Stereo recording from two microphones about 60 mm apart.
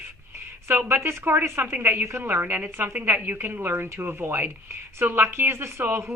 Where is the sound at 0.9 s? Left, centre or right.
Right.